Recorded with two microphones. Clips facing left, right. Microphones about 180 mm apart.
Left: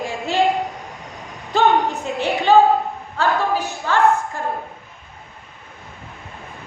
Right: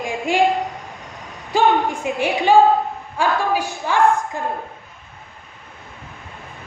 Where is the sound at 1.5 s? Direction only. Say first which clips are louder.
Even; 10° right (ahead or behind).